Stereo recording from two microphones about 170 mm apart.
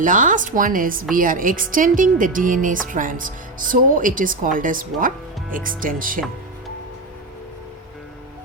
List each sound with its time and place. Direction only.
0.0 s a woman's voice: 50° right (ahead or behind)